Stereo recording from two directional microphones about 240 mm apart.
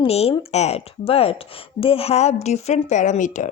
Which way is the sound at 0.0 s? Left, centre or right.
Left.